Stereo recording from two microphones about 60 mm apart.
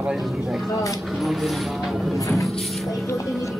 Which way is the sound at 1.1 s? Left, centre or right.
Centre.